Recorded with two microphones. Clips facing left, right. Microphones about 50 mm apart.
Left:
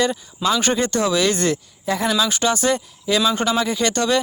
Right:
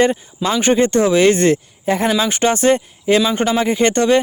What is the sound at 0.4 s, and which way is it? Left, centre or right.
Speech, right.